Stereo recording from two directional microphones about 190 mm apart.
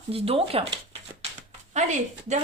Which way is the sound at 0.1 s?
30° right (ahead or behind).